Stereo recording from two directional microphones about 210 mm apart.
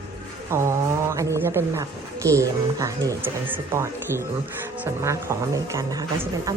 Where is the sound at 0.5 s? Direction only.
15° right (ahead or behind).